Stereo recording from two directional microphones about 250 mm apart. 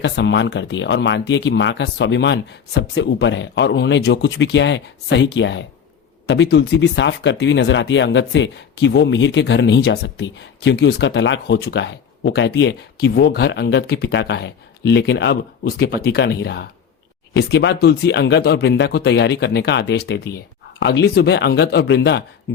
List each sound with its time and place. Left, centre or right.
0.0 s speech: left